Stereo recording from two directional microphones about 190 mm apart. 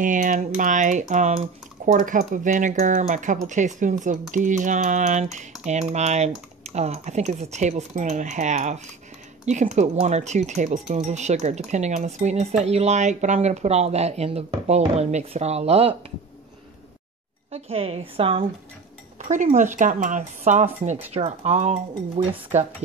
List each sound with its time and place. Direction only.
0.0 s speech: 45° right (ahead or behind)
17.5 s speech: 35° right (ahead or behind)
19.1 s speech: 40° right (ahead or behind)